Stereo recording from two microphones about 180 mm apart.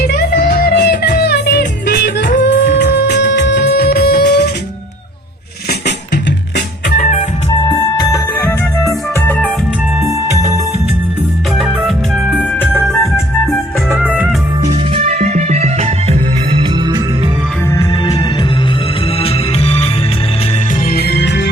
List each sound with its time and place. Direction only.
0.0 s music: 60° left (ahead or behind)
6.9 s music: 45° left (ahead or behind)
7.7 s music: 20° left (ahead or behind)
10.0 s music: 15° right (ahead or behind)
11.5 s music: centre (ahead or behind)
14.9 s music: 35° right (ahead or behind)
17.7 s music: 25° left (ahead or behind)
19.2 s music: 35° left (ahead or behind)
20.9 s music: 60° left (ahead or behind)